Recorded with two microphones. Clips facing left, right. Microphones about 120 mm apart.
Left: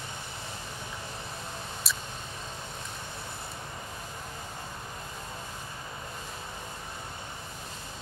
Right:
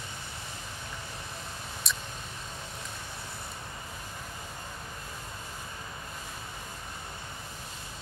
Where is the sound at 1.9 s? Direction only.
5° left (ahead or behind).